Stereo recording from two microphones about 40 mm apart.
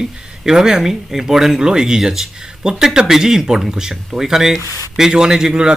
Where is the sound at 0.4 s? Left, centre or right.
Centre.